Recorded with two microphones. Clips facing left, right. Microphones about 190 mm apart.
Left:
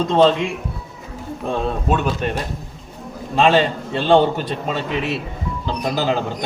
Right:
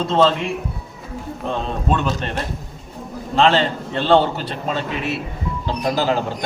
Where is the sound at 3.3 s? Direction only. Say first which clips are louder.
Left 1 dB; 15° left (ahead or behind).